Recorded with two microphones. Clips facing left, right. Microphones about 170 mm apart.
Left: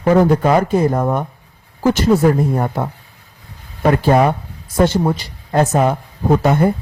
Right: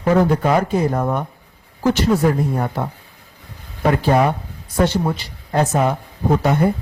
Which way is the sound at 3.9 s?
45° left (ahead or behind).